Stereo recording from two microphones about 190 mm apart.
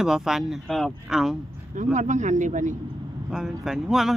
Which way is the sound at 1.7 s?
40° right (ahead or behind).